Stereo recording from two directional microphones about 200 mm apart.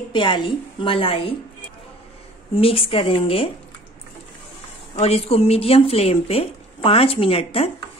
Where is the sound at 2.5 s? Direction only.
30° left (ahead or behind).